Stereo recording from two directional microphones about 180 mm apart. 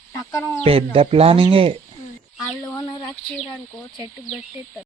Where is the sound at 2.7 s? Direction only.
20° left (ahead or behind).